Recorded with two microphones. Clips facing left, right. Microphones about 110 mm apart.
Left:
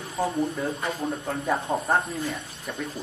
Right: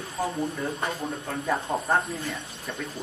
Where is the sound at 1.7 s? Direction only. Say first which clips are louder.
Left 2 dB; 25° left (ahead or behind).